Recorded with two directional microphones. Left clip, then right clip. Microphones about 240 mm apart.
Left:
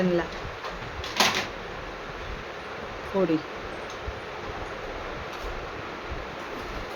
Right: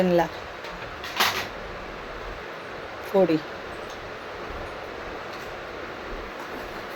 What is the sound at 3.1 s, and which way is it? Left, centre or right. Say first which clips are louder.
Speech: right 6 dB; centre.